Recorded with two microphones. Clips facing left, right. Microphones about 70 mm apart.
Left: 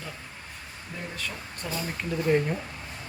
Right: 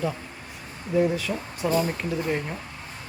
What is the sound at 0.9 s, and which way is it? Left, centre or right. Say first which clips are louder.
Speech: right 18 dB; centre.